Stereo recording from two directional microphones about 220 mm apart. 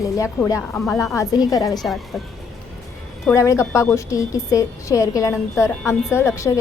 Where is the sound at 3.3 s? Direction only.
15° left (ahead or behind).